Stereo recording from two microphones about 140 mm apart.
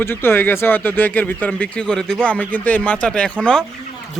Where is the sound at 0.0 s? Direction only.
15° left (ahead or behind).